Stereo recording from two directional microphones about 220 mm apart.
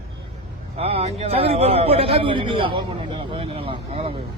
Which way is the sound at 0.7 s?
25° right (ahead or behind).